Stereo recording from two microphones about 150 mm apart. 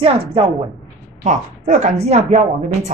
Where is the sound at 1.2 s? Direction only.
50° right (ahead or behind).